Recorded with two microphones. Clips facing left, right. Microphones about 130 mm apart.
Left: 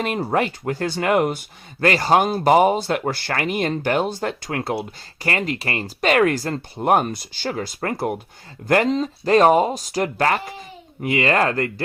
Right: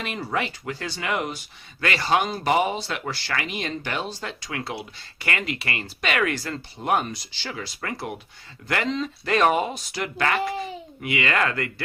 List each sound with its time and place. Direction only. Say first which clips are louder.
0.0 s speech: left 7 dB; 45° left (ahead or behind)
5.2 s speech: left 5 dB; 35° left (ahead or behind)